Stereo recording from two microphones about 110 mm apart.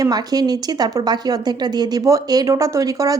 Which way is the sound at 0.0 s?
35° right (ahead or behind).